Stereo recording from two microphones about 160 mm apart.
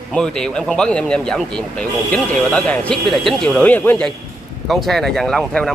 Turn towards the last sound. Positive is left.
turn(degrees=5)  # may be behind; listen again after turning